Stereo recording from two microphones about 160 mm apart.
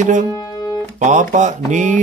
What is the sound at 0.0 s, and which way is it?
Mantra, 50° right (ahead or behind).